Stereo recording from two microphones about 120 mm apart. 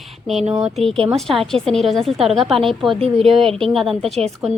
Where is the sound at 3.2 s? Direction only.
5° left (ahead or behind).